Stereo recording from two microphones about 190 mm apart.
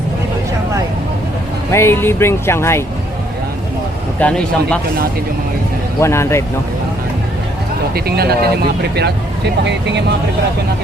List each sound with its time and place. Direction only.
1.7 s speech: 10° left (ahead or behind)
4.2 s speech: 5° left (ahead or behind)
6.0 s speech: 15° left (ahead or behind)
7.9 s speech: 55° right (ahead or behind)